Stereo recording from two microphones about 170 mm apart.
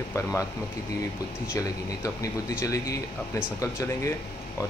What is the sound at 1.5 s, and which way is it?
Speech, 20° left (ahead or behind).